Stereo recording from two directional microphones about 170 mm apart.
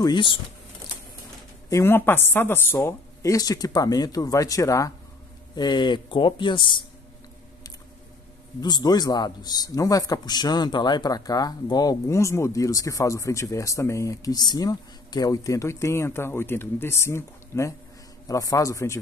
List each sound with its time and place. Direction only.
0.0 s a man's voice: 30° left (ahead or behind)
1.7 s a man's voice: 15° left (ahead or behind)
8.5 s a man's voice: 25° left (ahead or behind)